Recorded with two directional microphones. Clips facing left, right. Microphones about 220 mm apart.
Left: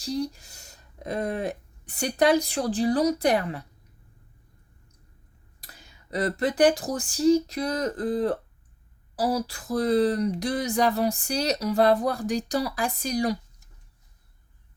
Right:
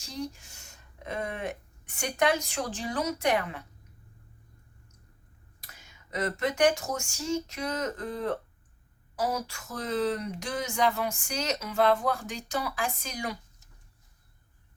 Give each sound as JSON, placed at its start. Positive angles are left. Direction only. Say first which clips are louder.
{"t": 0.0, "sound": "speech", "louder": "left 8 dB", "side_deg": 35}
{"t": 5.5, "sound": "speech", "louder": "left 3 dB", "side_deg": 35}